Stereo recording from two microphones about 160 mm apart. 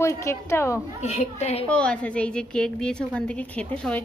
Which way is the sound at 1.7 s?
5° left (ahead or behind).